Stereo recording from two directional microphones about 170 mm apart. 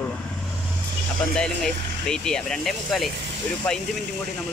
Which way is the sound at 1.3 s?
5° left (ahead or behind).